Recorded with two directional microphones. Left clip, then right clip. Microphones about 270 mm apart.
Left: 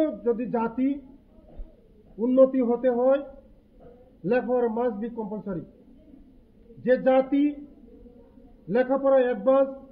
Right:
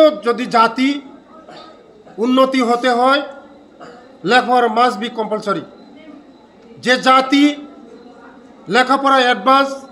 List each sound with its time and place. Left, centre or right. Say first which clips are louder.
0.0 s a man's voice: right 13 dB; centre
2.2 s a man's voice: right 6 dB; centre
4.3 s a man's voice: right 11 dB; centre
6.8 s a man's voice: right 9 dB; centre
8.6 s a man's voice: right 9 dB; centre